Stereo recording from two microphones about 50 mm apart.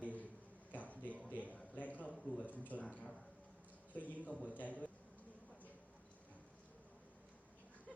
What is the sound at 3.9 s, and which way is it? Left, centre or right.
Speech, left.